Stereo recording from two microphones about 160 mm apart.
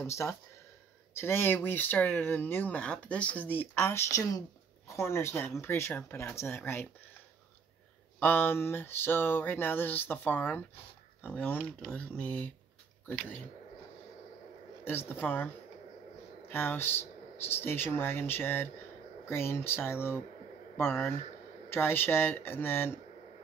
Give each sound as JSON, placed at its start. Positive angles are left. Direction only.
{"t": 0.0, "sound": "speech", "side_deg": 20}
{"t": 8.2, "sound": "speech", "side_deg": 10}
{"t": 14.9, "sound": "speech", "side_deg": 15}